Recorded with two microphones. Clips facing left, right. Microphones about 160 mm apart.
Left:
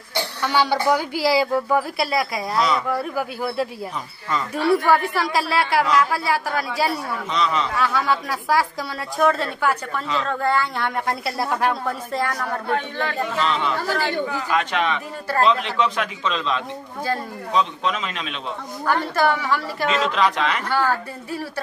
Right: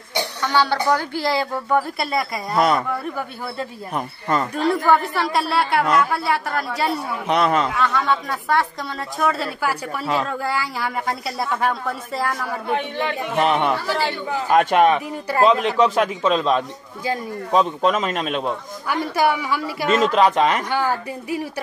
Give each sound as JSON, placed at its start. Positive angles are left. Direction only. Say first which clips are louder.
{"t": 0.4, "sound": "a woman's voice", "louder": "even", "side_deg": 10}
{"t": 2.5, "sound": "speech", "louder": "right 3 dB", "side_deg": -55}
{"t": 2.9, "sound": "speech", "louder": "left 2 dB", "side_deg": 5}
{"t": 3.9, "sound": "a man's voice", "louder": "right 5 dB", "side_deg": -50}
{"t": 4.8, "sound": "speech", "louder": "right 1 dB", "side_deg": 0}
{"t": 7.2, "sound": "speech", "louder": "right 5 dB", "side_deg": -55}
{"t": 7.7, "sound": "speech", "louder": "right 1 dB", "side_deg": 0}
{"t": 12.7, "sound": "a woman's voice", "louder": "right 4 dB", "side_deg": -15}
{"t": 13.4, "sound": "speech", "louder": "right 6 dB", "side_deg": -55}
{"t": 13.7, "sound": "speech", "louder": "even", "side_deg": 45}
{"t": 14.5, "sound": "a man's voice", "louder": "right 9 dB", "side_deg": -50}
{"t": 18.9, "sound": "a woman's voice", "louder": "even", "side_deg": -10}
{"t": 19.9, "sound": "a man's voice", "louder": "right 5 dB", "side_deg": -45}
{"t": 20.6, "sound": "a woman's voice", "louder": "even", "side_deg": -15}